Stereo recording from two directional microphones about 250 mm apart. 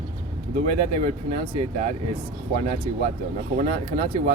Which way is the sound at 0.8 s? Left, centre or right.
Right.